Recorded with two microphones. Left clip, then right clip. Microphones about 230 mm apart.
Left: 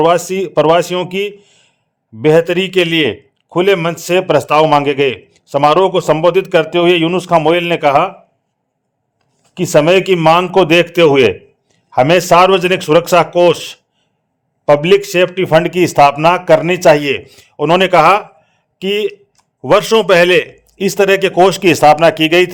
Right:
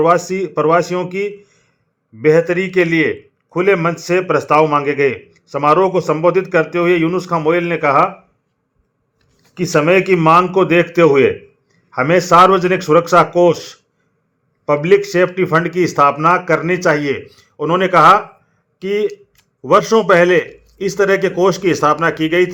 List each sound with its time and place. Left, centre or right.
0.0 s a man's voice: left
9.6 s a man's voice: left